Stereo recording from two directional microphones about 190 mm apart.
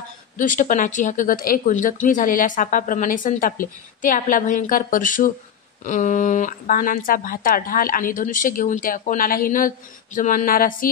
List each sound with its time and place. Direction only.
0.4 s speech: 45° left (ahead or behind)